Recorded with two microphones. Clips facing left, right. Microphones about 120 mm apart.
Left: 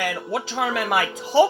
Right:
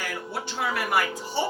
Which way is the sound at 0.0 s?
90° left.